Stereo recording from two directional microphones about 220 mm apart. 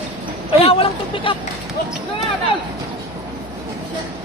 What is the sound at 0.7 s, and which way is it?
Speech, 25° left (ahead or behind).